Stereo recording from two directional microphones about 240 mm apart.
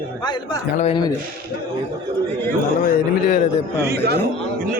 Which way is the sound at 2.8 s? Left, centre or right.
Left.